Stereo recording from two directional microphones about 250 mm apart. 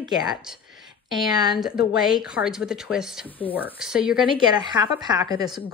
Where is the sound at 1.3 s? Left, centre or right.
Centre.